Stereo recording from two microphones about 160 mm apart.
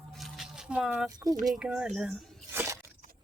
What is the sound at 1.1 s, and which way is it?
Speech, 25° right (ahead or behind).